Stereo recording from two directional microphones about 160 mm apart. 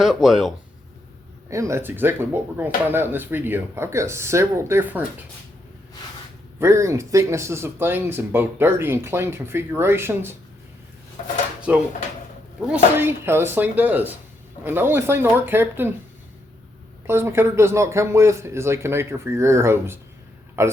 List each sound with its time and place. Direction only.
0.0 s speech: centre (ahead or behind)
1.5 s speech: 20° right (ahead or behind)
6.6 s speech: 20° right (ahead or behind)
11.7 s speech: 10° right (ahead or behind)
17.1 s speech: 15° right (ahead or behind)